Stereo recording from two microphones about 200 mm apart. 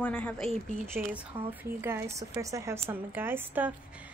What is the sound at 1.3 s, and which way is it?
A woman's voice, 10° right (ahead or behind).